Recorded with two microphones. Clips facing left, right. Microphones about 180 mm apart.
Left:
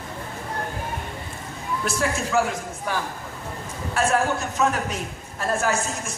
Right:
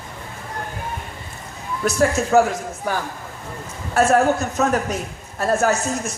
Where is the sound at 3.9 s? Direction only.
40° right (ahead or behind).